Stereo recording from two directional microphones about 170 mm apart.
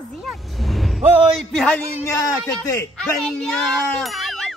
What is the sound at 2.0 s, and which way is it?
Speech, 20° left (ahead or behind).